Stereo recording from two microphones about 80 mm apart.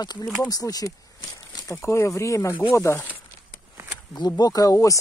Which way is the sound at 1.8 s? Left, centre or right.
Left.